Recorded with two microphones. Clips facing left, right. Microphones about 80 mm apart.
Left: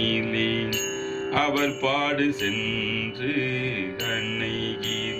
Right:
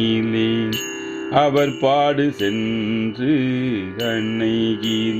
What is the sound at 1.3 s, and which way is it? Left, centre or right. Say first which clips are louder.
Mantra: right 9 dB; right.